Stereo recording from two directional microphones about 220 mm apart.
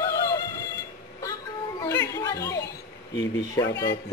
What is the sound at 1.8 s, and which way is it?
Chatter, 15° left (ahead or behind).